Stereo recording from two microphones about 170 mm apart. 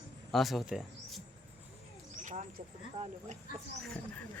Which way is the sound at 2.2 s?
45° right (ahead or behind).